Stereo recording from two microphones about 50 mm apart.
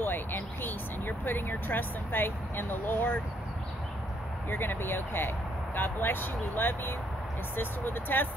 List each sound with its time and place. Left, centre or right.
0.0 s speech: left
4.5 s speech: left